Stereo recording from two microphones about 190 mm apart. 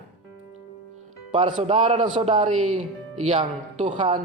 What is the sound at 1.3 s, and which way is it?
A man's voice, 30° right (ahead or behind).